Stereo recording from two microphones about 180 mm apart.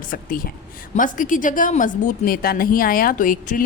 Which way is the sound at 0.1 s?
50° left (ahead or behind).